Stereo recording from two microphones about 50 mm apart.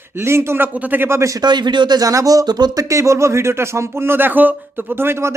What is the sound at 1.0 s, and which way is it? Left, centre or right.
Speech, right.